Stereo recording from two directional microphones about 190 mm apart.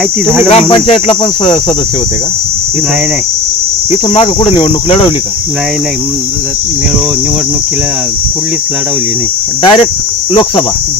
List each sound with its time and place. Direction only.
0.5 s cricket: 35° left (ahead or behind)
3.9 s cricket: 30° left (ahead or behind)
9.6 s cricket: 25° left (ahead or behind)